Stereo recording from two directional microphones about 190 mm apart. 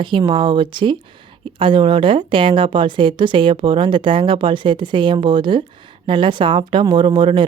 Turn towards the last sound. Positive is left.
turn(degrees=-25)  # may be behind; listen again after turning